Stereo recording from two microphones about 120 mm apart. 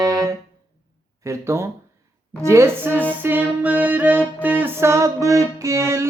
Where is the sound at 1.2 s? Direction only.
25° right (ahead or behind).